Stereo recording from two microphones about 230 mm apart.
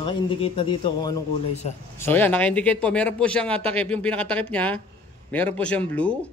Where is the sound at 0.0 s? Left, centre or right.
Left.